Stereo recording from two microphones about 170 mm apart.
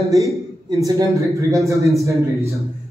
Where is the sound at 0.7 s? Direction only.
20° right (ahead or behind).